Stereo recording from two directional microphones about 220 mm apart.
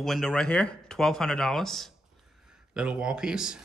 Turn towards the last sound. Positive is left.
turn(degrees=-5)  # may be behind; listen again after turning